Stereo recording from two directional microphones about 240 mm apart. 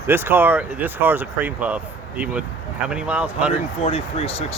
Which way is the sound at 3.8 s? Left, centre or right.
Left.